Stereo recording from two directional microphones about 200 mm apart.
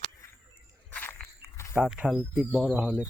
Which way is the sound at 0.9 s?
10° left (ahead or behind).